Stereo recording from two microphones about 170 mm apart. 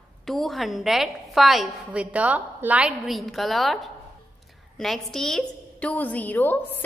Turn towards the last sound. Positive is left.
turn(degrees=10)  # may be behind; listen again after turning